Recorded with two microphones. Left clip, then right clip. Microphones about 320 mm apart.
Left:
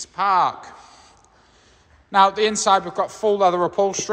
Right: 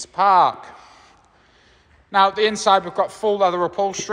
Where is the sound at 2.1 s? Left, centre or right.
Centre.